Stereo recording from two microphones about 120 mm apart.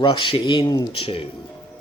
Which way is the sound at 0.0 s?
45° left (ahead or behind).